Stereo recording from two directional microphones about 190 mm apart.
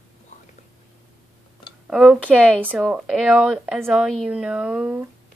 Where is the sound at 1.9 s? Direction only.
5° right (ahead or behind).